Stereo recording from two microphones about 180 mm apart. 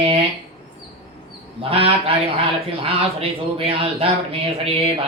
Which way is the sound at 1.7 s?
30° right (ahead or behind).